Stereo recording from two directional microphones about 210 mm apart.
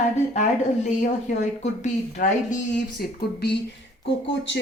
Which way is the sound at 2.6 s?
55° left (ahead or behind).